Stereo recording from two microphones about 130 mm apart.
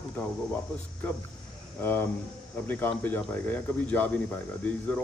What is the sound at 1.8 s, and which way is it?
A man's voice, 15° left (ahead or behind).